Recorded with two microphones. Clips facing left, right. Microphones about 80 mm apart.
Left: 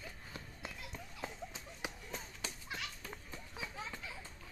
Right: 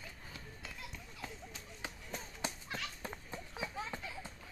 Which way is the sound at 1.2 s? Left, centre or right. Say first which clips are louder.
Left 3 dB; left.